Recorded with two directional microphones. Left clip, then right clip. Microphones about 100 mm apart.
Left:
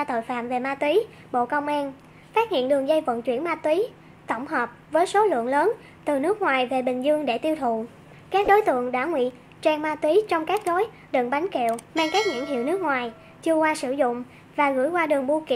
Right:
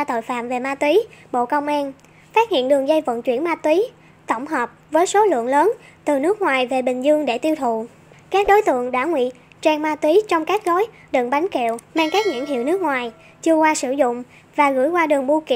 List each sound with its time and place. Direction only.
0.0 s a woman's voice: 40° right (ahead or behind)